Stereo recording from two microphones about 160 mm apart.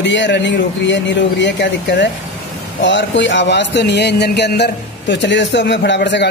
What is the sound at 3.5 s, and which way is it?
A man's voice, 90° left.